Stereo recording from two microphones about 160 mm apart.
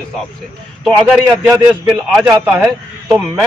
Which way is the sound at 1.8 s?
5° right (ahead or behind).